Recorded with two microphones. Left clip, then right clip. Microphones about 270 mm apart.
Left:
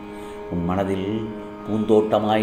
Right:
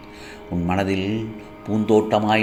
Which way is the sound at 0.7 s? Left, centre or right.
Centre.